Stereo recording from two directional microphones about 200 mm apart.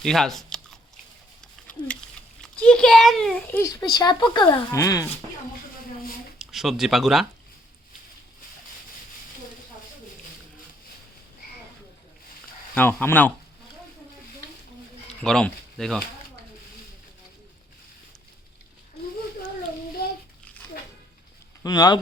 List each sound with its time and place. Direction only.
0.0 s biting: centre (ahead or behind)
1.8 s speech: 20° left (ahead or behind)
2.4 s a child's voice: 5° left (ahead or behind)
6.4 s speech: centre (ahead or behind)
12.7 s a child's voice: 10° left (ahead or behind)
15.2 s speech: 5° left (ahead or behind)
21.6 s speech: 20° left (ahead or behind)